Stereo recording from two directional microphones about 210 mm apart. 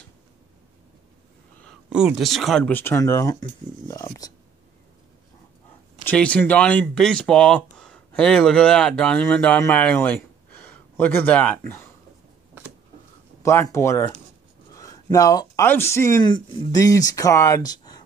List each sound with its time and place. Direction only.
1.6 s speech: centre (ahead or behind); by 4.3 s 15° left (ahead or behind)
6.0 s speech: 5° left (ahead or behind)
13.4 s speech: 15° left (ahead or behind)